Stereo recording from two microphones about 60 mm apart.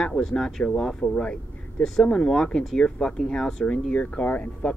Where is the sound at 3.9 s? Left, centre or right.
Left.